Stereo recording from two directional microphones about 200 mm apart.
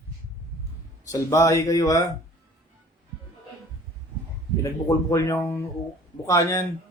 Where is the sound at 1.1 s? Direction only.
15° left (ahead or behind).